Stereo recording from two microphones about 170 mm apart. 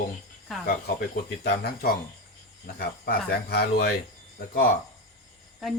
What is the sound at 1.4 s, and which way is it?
Speech, 65° left (ahead or behind).